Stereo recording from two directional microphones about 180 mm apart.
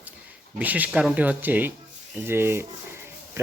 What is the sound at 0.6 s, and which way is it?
Speech, 10° right (ahead or behind).